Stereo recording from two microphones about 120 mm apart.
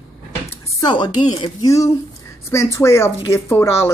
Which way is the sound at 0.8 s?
40° left (ahead or behind).